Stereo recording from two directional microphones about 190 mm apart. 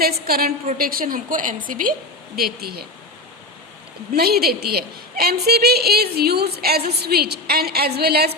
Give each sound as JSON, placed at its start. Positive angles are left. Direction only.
{"t": 0.3, "sound": "a woman's voice", "side_deg": -50}
{"t": 4.1, "sound": "a woman's voice", "side_deg": -55}